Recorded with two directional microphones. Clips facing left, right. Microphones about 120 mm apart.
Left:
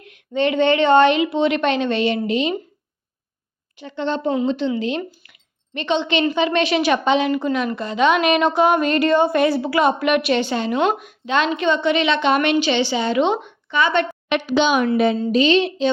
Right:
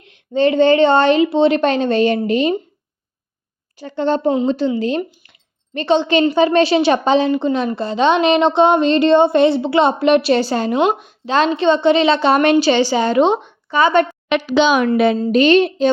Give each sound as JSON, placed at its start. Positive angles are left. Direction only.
{"t": 0.0, "sound": "a woman's voice", "side_deg": -30}
{"t": 3.8, "sound": "a woman's voice", "side_deg": -40}
{"t": 10.8, "sound": "a woman's voice", "side_deg": -25}
{"t": 14.5, "sound": "a woman's voice", "side_deg": -90}
{"t": 14.9, "sound": "a woman's voice", "side_deg": -70}
{"t": 15.3, "sound": "a woman's voice", "side_deg": -55}